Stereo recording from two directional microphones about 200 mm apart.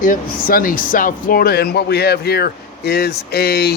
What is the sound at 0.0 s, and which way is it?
Speech, 45° left (ahead or behind).